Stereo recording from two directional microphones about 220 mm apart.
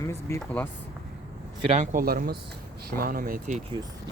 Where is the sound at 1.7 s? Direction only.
35° right (ahead or behind).